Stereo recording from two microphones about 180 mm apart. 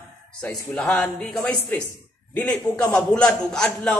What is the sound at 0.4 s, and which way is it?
A man's voice, 5° left (ahead or behind).